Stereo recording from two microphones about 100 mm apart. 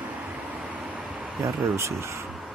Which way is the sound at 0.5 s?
15° right (ahead or behind).